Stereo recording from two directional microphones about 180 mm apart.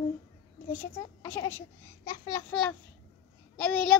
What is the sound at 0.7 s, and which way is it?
Babbling, 15° left (ahead or behind).